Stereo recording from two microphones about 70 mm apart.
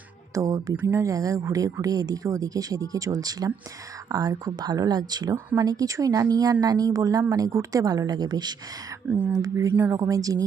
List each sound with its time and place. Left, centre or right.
0.3 s speech: right
0.8 s speech: right
1.0 s speech: right
5.5 s speech: right
9.0 s speech: right
9.9 s speech: right